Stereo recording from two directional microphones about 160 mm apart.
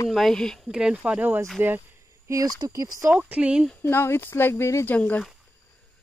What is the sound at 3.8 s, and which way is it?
Speech, 15° left (ahead or behind).